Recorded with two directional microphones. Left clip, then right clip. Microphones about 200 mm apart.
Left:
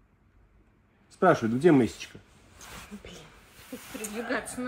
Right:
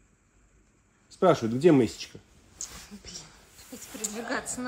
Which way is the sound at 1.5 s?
25° right (ahead or behind).